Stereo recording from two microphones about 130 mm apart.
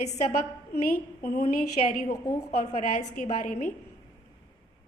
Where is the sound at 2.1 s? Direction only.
25° left (ahead or behind).